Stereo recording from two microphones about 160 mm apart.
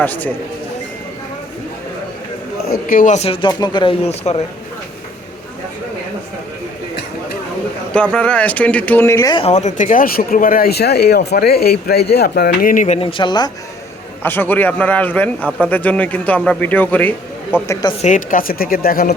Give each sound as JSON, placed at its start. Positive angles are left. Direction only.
{"t": 0.0, "sound": "a man's voice", "side_deg": 10}
{"t": 2.6, "sound": "speech", "side_deg": 60}
{"t": 3.4, "sound": "speech", "side_deg": 25}
{"t": 7.9, "sound": "a man's voice", "side_deg": 5}
{"t": 9.3, "sound": "speech", "side_deg": 40}
{"t": 13.0, "sound": "speech", "side_deg": 35}
{"t": 14.2, "sound": "a man's voice", "side_deg": 10}
{"t": 18.0, "sound": "speech", "side_deg": 55}